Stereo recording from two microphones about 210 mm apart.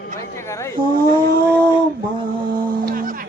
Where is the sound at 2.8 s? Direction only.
40° right (ahead or behind).